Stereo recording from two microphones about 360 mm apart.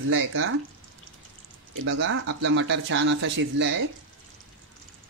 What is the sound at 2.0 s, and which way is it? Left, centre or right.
Speech, right.